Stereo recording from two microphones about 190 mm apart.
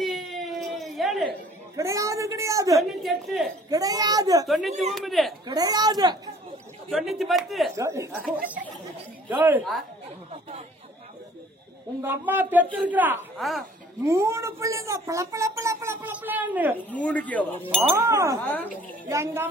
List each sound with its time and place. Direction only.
0.0 s baby cry: centre (ahead or behind)
1.8 s speech: 15° right (ahead or behind)
2.8 s speech: centre (ahead or behind)
3.7 s a child's voice: 20° right (ahead or behind)
4.5 s speech: centre (ahead or behind)
5.5 s a child's voice: 20° right (ahead or behind)
6.9 s speech: centre (ahead or behind)
7.7 s speech: 15° right (ahead or behind)
9.4 s speech: 5° right (ahead or behind)
12.0 s speech: 10° right (ahead or behind)
14.0 s speech: 15° right (ahead or behind)
16.7 s speech: 10° left (ahead or behind)
17.9 s speech: 15° right (ahead or behind)